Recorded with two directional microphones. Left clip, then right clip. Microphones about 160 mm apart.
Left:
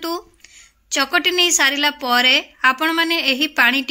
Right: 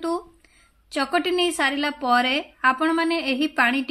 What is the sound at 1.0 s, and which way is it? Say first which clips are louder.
Speech: left 5 dB; 35° left (ahead or behind).